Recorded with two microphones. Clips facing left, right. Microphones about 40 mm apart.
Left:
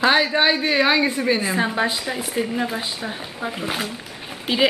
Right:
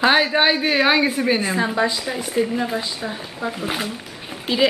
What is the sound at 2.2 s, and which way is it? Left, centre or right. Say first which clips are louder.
Speech: right 4 dB; centre.